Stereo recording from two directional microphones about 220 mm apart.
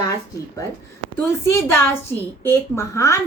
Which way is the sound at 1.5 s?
10° left (ahead or behind).